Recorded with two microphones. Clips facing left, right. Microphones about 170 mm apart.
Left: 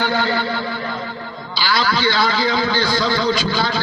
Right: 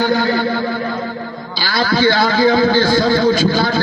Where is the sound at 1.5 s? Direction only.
50° right (ahead or behind).